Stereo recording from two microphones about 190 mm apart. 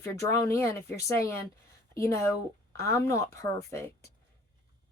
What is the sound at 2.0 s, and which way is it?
Speech, 15° left (ahead or behind).